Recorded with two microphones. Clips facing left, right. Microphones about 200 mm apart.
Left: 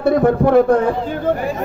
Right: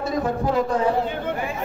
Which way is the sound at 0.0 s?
60° left (ahead or behind).